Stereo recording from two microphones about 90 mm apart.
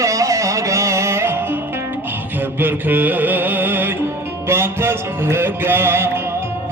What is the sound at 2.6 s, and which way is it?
Mantra, 20° right (ahead or behind).